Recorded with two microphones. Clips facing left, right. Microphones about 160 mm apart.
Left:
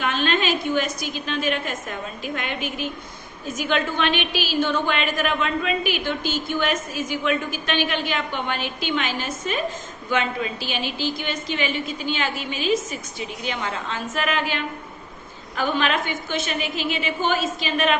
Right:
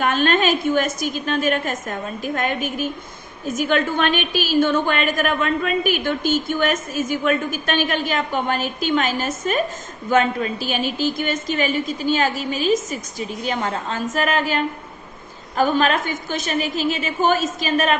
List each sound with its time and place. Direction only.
0.0 s a woman's voice: 45° right (ahead or behind)